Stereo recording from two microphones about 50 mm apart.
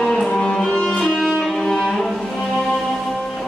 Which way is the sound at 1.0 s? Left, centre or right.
Centre.